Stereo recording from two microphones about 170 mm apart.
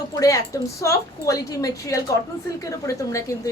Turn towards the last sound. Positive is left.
turn(degrees=20)  # may be behind; listen again after turning